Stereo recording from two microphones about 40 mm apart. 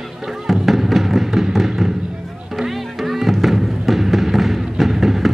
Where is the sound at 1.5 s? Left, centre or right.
Centre.